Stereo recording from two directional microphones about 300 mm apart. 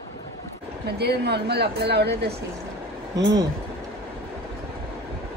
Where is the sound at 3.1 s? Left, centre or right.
Centre.